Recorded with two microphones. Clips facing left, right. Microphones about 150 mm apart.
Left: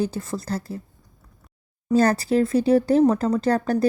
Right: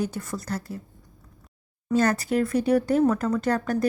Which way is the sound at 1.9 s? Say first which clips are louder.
Left 4 dB; 35° left (ahead or behind).